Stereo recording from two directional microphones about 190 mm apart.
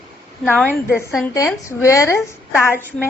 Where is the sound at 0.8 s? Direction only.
5° right (ahead or behind).